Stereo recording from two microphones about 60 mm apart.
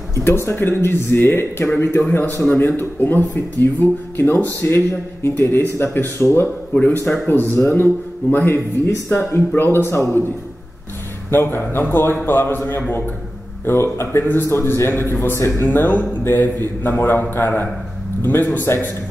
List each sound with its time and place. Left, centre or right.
0.1 s a man's voice: left
8.8 s a man's voice: left
11.2 s a man's voice: left